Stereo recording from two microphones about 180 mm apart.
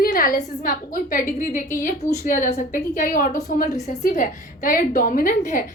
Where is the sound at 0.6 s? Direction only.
50° left (ahead or behind).